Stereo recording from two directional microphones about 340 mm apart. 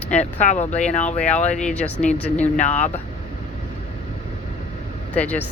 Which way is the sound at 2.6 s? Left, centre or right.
Left.